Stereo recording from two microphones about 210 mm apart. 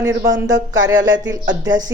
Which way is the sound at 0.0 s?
15° right (ahead or behind).